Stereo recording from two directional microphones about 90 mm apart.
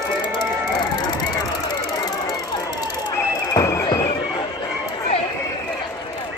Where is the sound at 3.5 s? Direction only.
35° left (ahead or behind).